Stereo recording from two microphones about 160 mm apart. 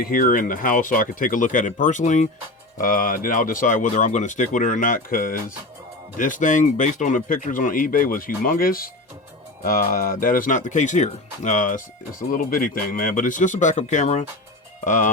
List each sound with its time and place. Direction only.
0.0 s speech: 60° left (ahead or behind)